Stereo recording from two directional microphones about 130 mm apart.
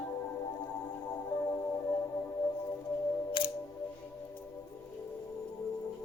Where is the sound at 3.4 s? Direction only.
40° left (ahead or behind).